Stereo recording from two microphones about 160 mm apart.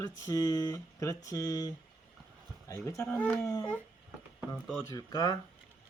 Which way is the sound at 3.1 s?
10° left (ahead or behind).